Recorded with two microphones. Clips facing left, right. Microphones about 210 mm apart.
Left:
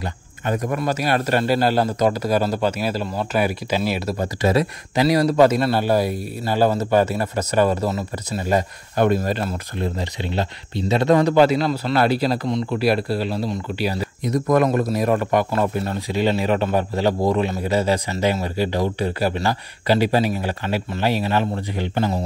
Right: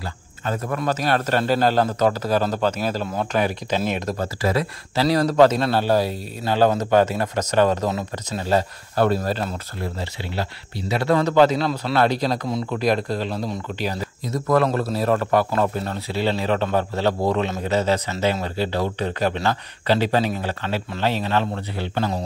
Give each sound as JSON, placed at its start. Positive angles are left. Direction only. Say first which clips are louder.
{"t": 0.0, "sound": "speech", "louder": "left 2 dB", "side_deg": 15}
{"t": 4.4, "sound": "speech", "louder": "left 6 dB", "side_deg": 25}
{"t": 5.0, "sound": "speech", "louder": "left 1 dB", "side_deg": 10}